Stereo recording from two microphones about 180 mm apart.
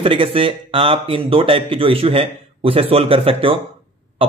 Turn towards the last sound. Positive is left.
turn(degrees=-30)  # may be behind; listen again after turning